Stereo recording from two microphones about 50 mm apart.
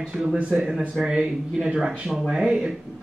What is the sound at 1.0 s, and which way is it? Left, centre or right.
Speech, centre.